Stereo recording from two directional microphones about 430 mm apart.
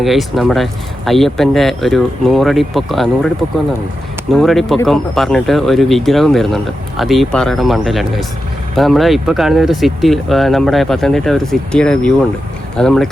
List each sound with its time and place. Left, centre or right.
0.0 s speech: centre
4.4 s speech: centre